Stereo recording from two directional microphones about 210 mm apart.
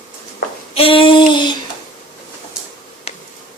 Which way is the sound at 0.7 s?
25° left (ahead or behind).